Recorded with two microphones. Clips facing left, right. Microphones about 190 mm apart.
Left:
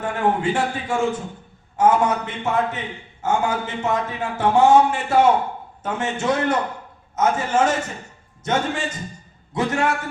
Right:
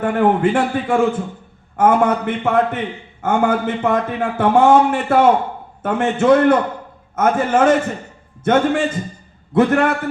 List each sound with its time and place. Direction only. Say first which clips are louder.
0.0 s a man's voice: right 6 dB; 55° right (ahead or behind)